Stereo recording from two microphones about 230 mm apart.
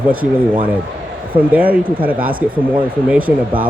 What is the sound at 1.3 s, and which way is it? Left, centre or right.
Speech, centre.